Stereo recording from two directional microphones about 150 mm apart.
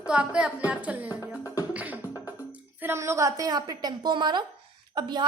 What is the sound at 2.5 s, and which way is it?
A woman's voice, 15° right (ahead or behind).